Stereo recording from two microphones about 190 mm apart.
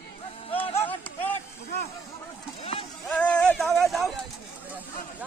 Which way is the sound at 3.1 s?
5° left (ahead or behind).